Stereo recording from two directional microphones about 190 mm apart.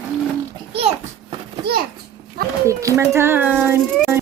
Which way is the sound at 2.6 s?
15° right (ahead or behind).